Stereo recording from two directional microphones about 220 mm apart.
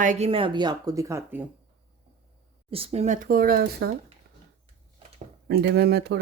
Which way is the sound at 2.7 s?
25° right (ahead or behind).